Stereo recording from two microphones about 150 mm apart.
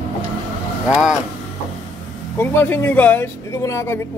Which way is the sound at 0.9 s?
5° right (ahead or behind).